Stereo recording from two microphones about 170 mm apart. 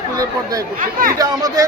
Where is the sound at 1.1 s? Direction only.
20° right (ahead or behind).